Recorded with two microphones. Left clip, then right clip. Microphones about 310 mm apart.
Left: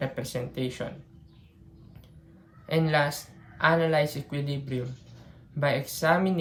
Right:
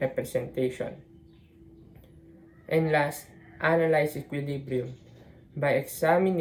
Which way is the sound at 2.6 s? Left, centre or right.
Left.